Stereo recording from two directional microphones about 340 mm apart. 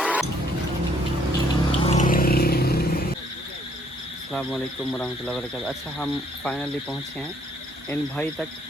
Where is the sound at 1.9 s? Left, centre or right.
Left.